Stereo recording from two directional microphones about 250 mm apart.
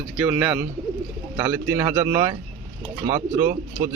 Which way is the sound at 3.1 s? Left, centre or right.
Right.